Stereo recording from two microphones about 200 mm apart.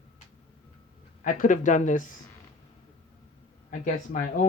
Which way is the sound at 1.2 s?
40° left (ahead or behind).